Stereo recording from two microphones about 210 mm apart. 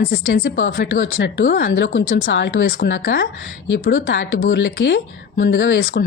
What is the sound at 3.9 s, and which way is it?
Speech, 65° left (ahead or behind).